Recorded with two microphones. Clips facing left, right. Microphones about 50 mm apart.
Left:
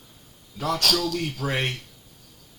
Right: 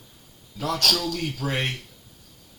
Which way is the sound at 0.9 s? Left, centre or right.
Left.